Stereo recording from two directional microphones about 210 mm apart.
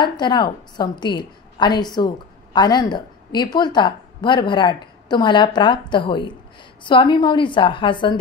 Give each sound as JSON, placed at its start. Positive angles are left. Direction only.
{"t": 0.0, "sound": "a woman's voice", "side_deg": 20}